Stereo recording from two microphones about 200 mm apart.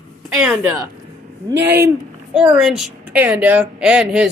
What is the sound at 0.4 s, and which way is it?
A woman's voice, centre (ahead or behind).